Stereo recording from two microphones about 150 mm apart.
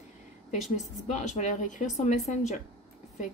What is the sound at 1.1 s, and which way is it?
Speech, 55° left (ahead or behind).